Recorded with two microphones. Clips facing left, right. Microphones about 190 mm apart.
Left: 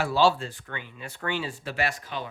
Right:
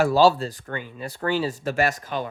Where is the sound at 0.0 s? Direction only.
40° right (ahead or behind).